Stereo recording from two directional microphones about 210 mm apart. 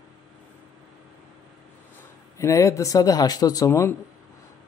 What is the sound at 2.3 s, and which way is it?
Speech, 15° left (ahead or behind).